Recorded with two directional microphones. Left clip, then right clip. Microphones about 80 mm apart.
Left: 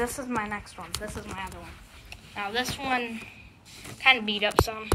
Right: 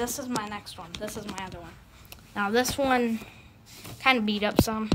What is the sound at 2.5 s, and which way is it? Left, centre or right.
Speech, right.